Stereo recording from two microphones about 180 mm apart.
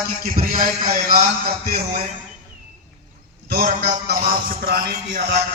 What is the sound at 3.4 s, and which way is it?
A man's voice, 60° right (ahead or behind).